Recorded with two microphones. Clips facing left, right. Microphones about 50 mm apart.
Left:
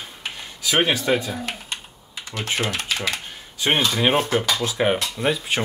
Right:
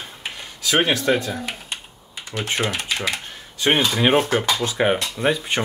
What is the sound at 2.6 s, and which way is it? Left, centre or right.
Speech, right.